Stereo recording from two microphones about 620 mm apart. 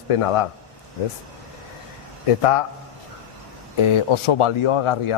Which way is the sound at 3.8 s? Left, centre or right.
Left.